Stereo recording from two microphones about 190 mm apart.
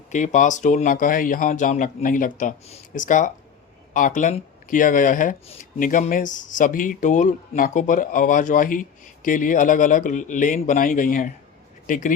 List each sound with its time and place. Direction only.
0.1 s speech: 40° left (ahead or behind)